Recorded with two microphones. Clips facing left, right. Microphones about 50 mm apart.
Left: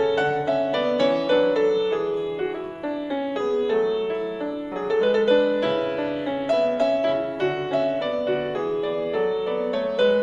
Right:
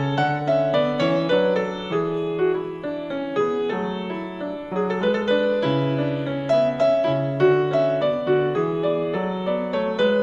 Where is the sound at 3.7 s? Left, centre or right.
Right.